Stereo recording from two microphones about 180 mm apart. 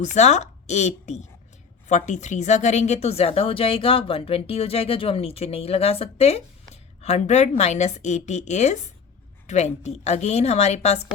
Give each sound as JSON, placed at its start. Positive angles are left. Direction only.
{"t": 0.0, "sound": "a woman's voice", "side_deg": 40}